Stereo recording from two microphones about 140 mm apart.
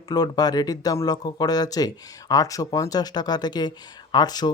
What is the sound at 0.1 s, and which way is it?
Speech, 30° left (ahead or behind).